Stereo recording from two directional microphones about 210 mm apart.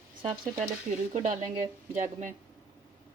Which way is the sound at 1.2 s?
40° right (ahead or behind).